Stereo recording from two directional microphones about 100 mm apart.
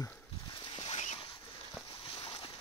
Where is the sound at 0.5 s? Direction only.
60° left (ahead or behind); by 1.2 s 85° left.